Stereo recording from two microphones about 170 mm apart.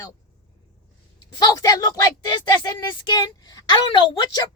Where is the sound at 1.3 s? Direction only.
25° left (ahead or behind).